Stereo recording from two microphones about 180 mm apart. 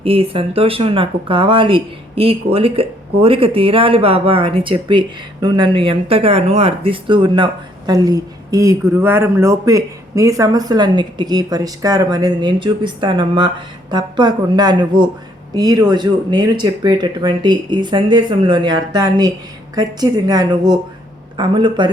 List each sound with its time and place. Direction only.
0.0 s speech: 30° right (ahead or behind)